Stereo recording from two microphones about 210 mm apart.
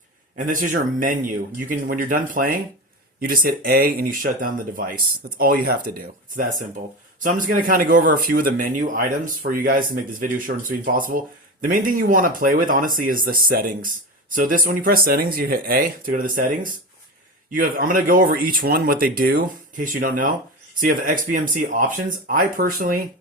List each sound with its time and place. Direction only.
0.3 s speech: 40° right (ahead or behind)